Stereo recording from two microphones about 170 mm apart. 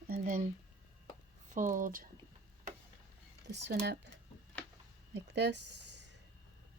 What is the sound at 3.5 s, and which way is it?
Speech, 80° right.